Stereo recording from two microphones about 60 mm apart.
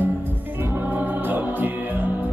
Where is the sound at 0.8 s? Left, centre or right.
Right.